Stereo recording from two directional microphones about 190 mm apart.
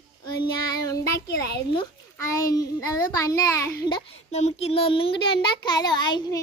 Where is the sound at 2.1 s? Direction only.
20° left (ahead or behind).